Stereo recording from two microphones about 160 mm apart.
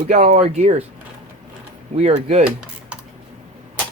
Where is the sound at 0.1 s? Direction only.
40° right (ahead or behind).